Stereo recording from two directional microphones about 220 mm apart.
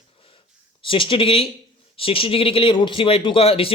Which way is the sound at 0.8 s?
25° left (ahead or behind).